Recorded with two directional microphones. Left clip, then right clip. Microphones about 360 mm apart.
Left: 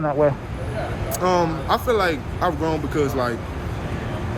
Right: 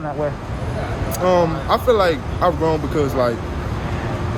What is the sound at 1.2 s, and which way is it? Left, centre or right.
Speech, centre.